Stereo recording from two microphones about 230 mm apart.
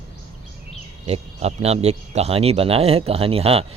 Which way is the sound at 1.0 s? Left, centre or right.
Right.